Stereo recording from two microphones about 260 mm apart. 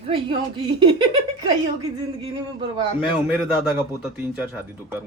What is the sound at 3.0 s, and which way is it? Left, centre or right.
Speech, centre.